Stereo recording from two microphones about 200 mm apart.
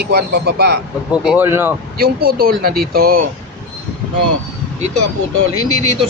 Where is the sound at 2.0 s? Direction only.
50° right (ahead or behind).